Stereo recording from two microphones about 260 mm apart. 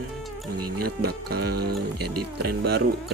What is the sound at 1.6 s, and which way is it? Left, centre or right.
Speech, right.